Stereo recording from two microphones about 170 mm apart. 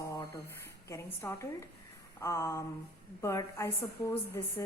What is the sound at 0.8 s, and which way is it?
A woman's voice, 15° left (ahead or behind).